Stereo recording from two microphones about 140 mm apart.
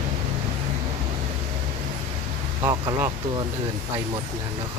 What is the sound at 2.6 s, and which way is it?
Speech, 30° right (ahead or behind).